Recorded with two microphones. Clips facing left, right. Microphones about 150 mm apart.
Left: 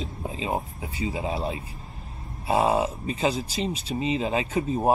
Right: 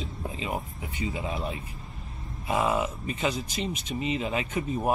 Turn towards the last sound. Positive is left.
turn(degrees=30)  # may be behind; listen again after turning